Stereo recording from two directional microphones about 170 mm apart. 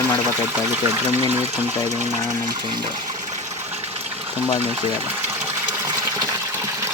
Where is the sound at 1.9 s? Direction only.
45° right (ahead or behind).